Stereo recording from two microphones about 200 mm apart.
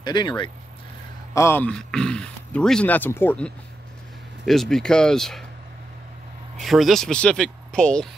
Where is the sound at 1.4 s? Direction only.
10° left (ahead or behind).